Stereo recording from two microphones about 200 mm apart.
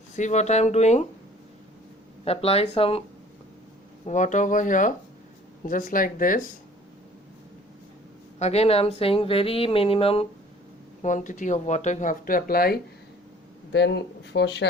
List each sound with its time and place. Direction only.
0.2 s speech: 35° left (ahead or behind)
2.2 s speech: 30° left (ahead or behind)
4.0 s speech: 40° left (ahead or behind)
8.4 s speech: 30° left (ahead or behind)
11.0 s speech: 40° left (ahead or behind); by 14.7 s 60° left (ahead or behind)